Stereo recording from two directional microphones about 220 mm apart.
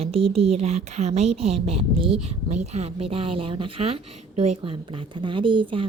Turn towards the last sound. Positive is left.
turn(degrees=-20)  # may be behind; listen again after turning